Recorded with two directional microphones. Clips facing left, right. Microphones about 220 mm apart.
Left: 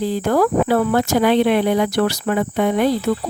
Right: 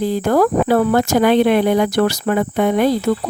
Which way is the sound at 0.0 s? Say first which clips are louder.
Right 2 dB; 45° right (ahead or behind).